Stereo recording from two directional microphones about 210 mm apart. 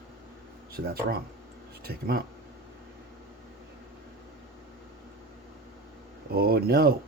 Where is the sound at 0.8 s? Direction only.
45° right (ahead or behind).